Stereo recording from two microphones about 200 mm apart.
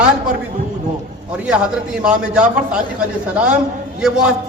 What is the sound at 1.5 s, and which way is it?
Speech, 5° right (ahead or behind).